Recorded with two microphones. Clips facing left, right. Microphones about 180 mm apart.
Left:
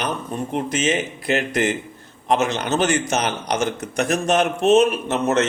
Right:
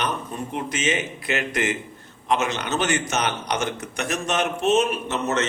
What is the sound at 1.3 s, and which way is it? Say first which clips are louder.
Speech: left 4 dB; 35° left (ahead or behind).